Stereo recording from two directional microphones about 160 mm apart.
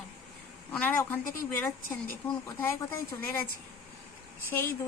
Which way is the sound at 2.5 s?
15° left (ahead or behind).